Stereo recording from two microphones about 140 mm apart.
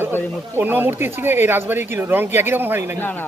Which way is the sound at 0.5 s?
15° right (ahead or behind).